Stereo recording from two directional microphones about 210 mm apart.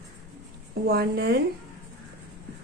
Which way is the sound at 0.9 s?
45° right (ahead or behind).